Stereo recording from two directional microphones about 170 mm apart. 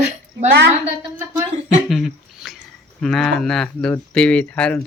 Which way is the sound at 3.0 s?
5° left (ahead or behind).